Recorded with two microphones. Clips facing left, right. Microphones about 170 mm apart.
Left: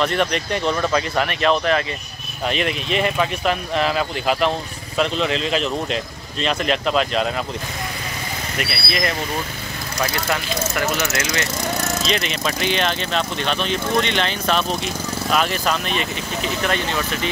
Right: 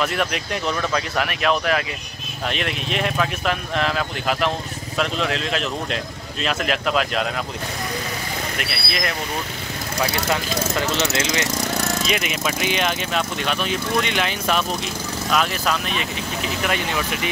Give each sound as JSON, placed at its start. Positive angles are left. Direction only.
{"t": 0.0, "sound": "speech", "side_deg": -5}
{"t": 8.5, "sound": "speech", "side_deg": 0}
{"t": 10.1, "sound": "speech", "side_deg": -20}
{"t": 12.1, "sound": "speech", "side_deg": -10}
{"t": 16.6, "sound": "speech", "side_deg": -10}